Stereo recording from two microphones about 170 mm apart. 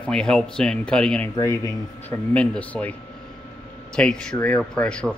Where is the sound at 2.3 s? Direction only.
5° left (ahead or behind).